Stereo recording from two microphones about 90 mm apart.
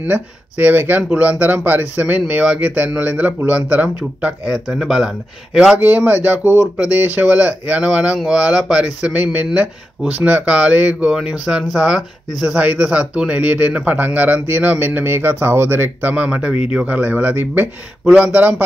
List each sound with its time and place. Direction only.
0.0 s a man's voice: 20° right (ahead or behind)
4.6 s speech: 5° right (ahead or behind)
5.9 s a man's voice: 20° right (ahead or behind)